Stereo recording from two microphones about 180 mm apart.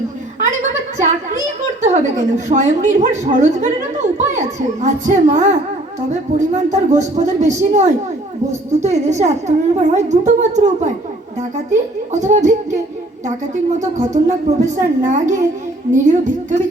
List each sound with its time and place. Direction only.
1.8 s a woman's voice: 40° right (ahead or behind)